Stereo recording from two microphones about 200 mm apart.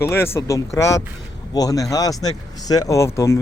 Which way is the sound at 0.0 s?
10° left (ahead or behind).